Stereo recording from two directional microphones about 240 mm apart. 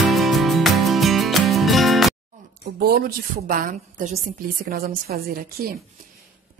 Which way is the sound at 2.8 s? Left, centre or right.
Right.